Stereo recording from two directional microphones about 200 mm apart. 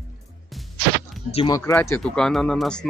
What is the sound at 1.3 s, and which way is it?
Speech, 30° left (ahead or behind).